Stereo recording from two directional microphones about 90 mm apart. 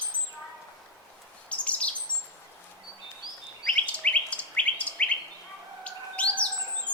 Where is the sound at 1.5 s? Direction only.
15° left (ahead or behind).